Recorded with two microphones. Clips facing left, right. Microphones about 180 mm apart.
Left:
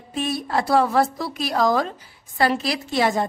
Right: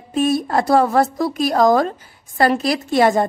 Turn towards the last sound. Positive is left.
turn(degrees=-50)  # may be behind; listen again after turning